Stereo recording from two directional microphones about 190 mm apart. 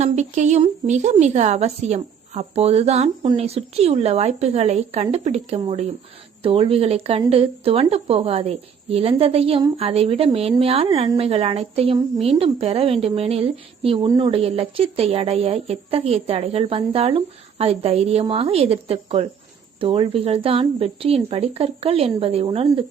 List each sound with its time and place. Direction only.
0.0 s a woman's voice: 40° right (ahead or behind)